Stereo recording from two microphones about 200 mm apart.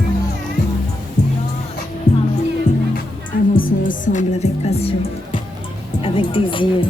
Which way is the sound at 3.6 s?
45° left (ahead or behind).